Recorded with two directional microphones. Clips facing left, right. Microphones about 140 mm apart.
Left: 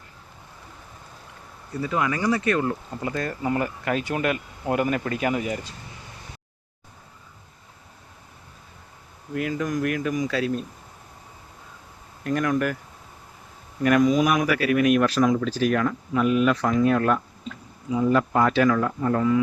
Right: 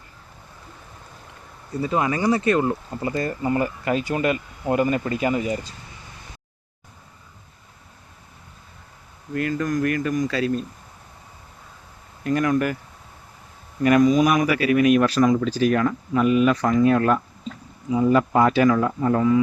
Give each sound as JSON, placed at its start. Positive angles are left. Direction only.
{"t": 1.8, "sound": "speech", "side_deg": -25}
{"t": 2.9, "sound": "speech", "side_deg": -5}
{"t": 9.3, "sound": "speech", "side_deg": 5}
{"t": 12.2, "sound": "speech", "side_deg": -5}
{"t": 13.8, "sound": "speech", "side_deg": 0}